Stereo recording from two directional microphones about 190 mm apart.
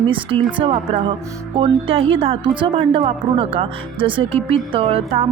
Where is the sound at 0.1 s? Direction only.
30° right (ahead or behind).